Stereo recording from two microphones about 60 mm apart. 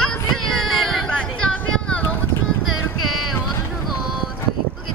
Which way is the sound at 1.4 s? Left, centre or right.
Centre.